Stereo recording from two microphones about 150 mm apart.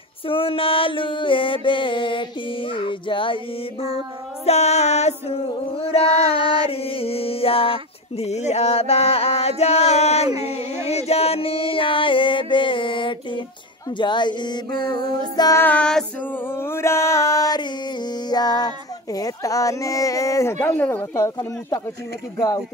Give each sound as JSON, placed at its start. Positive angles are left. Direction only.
{"t": 0.3, "sound": "music", "side_deg": 35}
{"t": 4.5, "sound": "a sound", "side_deg": 45}
{"t": 6.1, "sound": "child singing", "side_deg": -25}
{"t": 6.7, "sound": "a sound", "side_deg": 40}
{"t": 13.9, "sound": "music", "side_deg": 30}
{"t": 14.9, "sound": "speech", "side_deg": 25}
{"t": 15.6, "sound": "music", "side_deg": 10}
{"t": 16.4, "sound": "music", "side_deg": 15}
{"t": 18.3, "sound": "speech", "side_deg": 25}
{"t": 21.2, "sound": "speech", "side_deg": 25}